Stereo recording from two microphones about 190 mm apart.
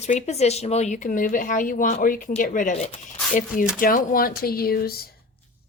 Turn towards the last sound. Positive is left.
turn(degrees=55)  # may be behind; listen again after turning